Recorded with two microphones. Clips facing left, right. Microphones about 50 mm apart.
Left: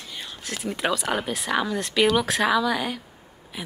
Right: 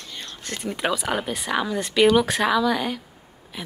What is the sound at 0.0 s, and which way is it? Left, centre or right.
A woman's voice, centre.